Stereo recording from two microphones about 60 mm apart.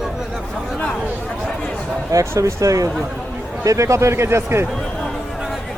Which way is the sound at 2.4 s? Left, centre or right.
Right.